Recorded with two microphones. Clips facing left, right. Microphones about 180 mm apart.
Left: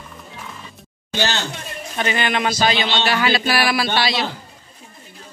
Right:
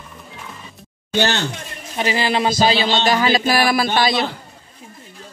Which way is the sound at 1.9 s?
30° right (ahead or behind).